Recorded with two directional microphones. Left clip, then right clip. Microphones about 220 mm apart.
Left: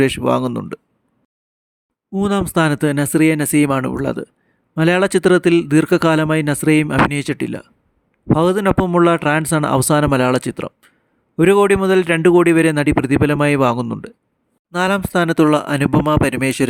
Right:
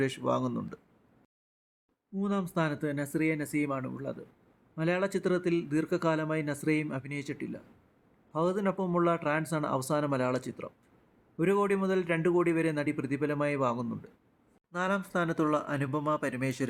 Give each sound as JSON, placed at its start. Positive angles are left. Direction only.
{"t": 0.0, "sound": "a man's voice", "side_deg": 40}
{"t": 2.2, "sound": "a man's voice", "side_deg": 50}